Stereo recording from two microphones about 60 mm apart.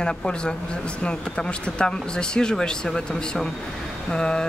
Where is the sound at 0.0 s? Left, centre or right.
Centre.